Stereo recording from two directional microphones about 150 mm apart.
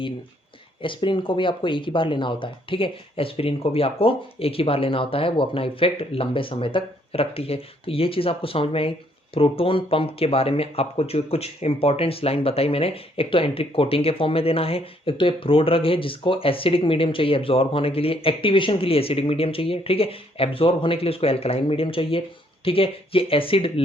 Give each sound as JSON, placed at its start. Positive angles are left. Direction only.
{"t": 0.8, "sound": "speech", "side_deg": 35}